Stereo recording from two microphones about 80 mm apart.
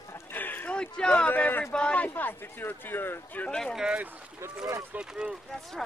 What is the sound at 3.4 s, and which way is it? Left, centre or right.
Speech, centre.